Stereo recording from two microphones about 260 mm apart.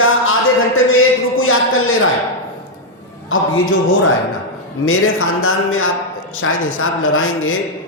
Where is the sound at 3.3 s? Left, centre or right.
Left.